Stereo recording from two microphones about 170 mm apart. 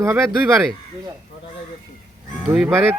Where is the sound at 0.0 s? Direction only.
15° right (ahead or behind).